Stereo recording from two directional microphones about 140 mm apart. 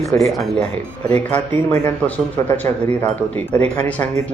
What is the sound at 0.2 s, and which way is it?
Speech, centre (ahead or behind).